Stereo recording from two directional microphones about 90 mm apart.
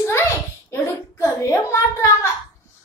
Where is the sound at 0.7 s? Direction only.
30° left (ahead or behind).